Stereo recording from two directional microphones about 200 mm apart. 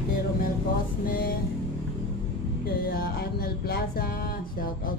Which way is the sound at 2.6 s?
50° left (ahead or behind).